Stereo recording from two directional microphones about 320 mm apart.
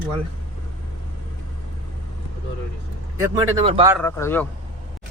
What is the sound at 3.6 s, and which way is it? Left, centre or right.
Speech, centre.